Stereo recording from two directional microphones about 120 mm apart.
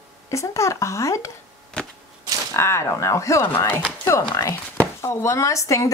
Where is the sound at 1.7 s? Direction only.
10° left (ahead or behind).